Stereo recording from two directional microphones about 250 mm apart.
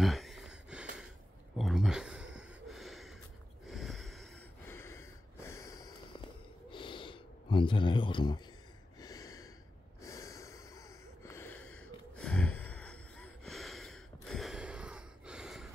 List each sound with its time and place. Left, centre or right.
0.0 s a sound: centre
4.6 s snort: centre
6.7 s a sound: centre
9.0 s gasp: centre
10.0 s snort: centre
11.7 s gasp: centre